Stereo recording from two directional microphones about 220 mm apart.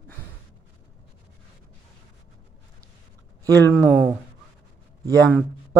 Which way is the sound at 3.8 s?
Centre (ahead or behind).